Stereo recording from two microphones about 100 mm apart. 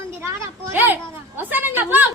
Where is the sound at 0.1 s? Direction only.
25° right (ahead or behind).